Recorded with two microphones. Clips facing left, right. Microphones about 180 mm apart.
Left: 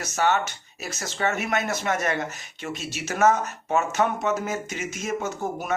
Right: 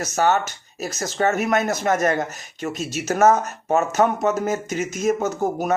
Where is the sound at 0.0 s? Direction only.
40° right (ahead or behind).